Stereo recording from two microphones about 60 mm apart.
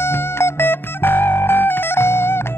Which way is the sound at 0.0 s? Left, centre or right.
Left.